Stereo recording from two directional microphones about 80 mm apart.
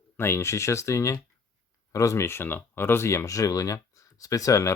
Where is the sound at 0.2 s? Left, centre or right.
Left.